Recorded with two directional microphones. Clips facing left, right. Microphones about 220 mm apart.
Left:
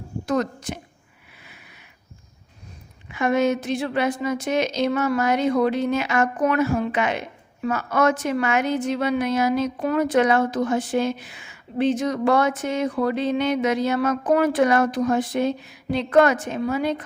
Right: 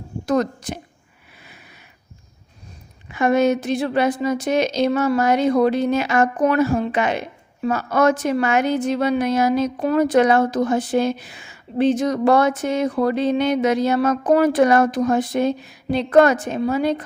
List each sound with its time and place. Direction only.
0.3 s a woman's voice: 35° right (ahead or behind)
3.1 s a woman's voice: 40° right (ahead or behind)